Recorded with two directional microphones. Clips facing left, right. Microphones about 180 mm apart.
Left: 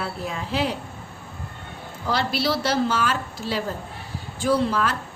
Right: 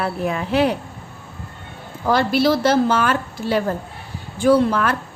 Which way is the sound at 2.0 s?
50° right (ahead or behind).